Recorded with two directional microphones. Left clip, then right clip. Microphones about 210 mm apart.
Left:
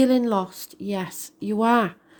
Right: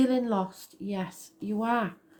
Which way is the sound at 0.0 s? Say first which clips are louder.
Left 6 dB; 50° left (ahead or behind).